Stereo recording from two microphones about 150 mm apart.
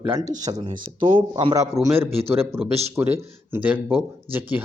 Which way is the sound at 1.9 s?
40° right (ahead or behind).